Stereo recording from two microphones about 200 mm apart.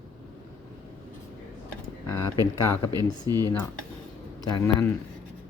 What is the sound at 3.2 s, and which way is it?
Speech, 20° right (ahead or behind).